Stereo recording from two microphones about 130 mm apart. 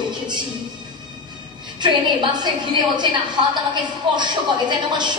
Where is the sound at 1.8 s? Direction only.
35° right (ahead or behind).